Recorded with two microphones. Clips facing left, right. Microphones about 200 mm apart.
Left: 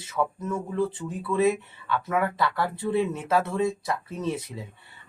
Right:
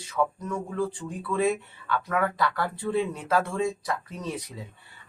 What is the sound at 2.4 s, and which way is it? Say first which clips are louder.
Speech: left 1 dB; 25° left (ahead or behind).